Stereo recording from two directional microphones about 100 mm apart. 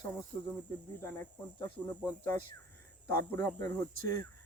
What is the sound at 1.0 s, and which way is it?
Speech, 20° left (ahead or behind).